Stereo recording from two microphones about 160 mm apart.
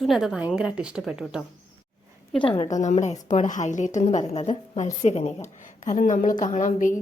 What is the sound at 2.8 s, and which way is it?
A woman's voice, 45° left (ahead or behind).